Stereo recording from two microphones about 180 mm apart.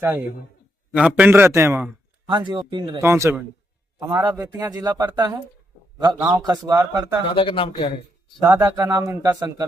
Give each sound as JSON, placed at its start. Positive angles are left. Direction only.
{"t": 0.9, "sound": "a man's voice", "side_deg": -5}
{"t": 3.0, "sound": "a man's voice", "side_deg": -15}
{"t": 7.3, "sound": "speech", "side_deg": 30}
{"t": 8.4, "sound": "a man's voice", "side_deg": -20}